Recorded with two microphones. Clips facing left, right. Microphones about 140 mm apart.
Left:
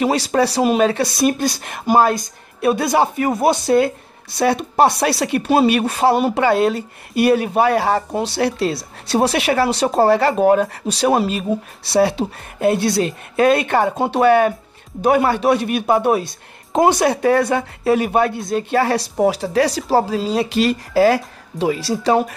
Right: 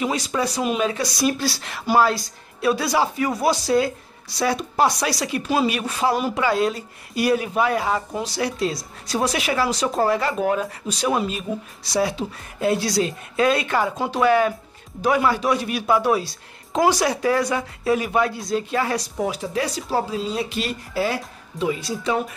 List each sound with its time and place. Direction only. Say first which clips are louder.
0.0 s speech: left 7 dB; 70° left (ahead or behind)
10.5 s speech: left 8 dB; 60° left (ahead or behind)
19.2 s speech: left 10 dB; 80° left